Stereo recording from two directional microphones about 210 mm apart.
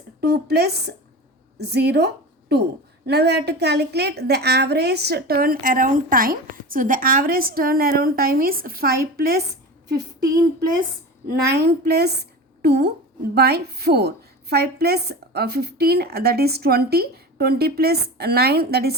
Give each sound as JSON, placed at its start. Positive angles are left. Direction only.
{"t": 0.2, "sound": "a woman's voice", "side_deg": -50}
{"t": 11.3, "sound": "a woman's voice", "side_deg": -50}